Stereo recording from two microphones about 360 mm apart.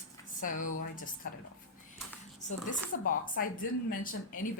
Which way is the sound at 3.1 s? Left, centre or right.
Left.